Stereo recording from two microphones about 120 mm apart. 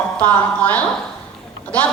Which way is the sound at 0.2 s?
15° left (ahead or behind).